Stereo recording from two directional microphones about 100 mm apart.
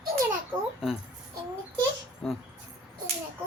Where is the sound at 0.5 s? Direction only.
40° right (ahead or behind).